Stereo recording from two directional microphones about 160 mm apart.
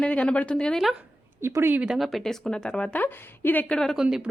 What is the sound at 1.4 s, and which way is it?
Speech, 15° right (ahead or behind).